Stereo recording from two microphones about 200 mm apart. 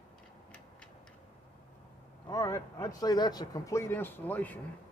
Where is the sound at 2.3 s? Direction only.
15° left (ahead or behind).